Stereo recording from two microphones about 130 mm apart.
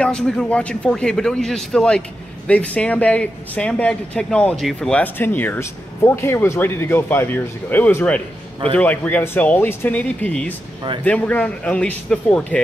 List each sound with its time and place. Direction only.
0.0 s a man's voice: 5° left (ahead or behind)